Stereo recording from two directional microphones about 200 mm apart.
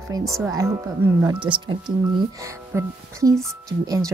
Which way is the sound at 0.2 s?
Centre (ahead or behind).